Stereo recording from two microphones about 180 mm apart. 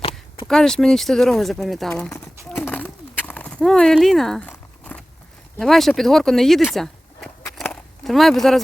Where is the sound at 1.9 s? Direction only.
10° left (ahead or behind).